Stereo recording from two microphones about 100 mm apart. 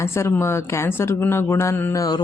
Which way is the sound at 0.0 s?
25° left (ahead or behind).